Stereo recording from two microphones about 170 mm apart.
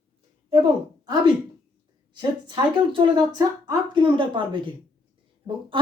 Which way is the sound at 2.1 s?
25° right (ahead or behind).